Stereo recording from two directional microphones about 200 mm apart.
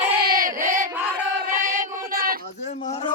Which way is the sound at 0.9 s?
10° right (ahead or behind).